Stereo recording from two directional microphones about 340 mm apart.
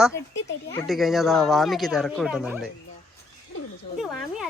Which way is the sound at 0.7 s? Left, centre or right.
Centre.